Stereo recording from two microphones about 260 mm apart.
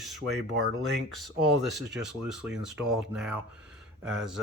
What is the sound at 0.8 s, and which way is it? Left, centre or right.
Speech, centre.